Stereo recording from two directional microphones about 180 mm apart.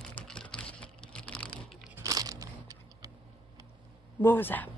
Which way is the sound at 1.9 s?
20° right (ahead or behind).